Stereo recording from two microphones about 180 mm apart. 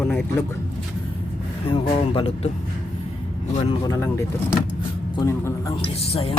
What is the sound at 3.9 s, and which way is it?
A man's voice, 15° left (ahead or behind).